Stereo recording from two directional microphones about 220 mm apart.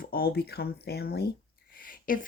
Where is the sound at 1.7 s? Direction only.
40° left (ahead or behind).